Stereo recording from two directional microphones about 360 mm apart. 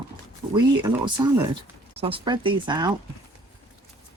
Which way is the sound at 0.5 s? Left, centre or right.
Centre.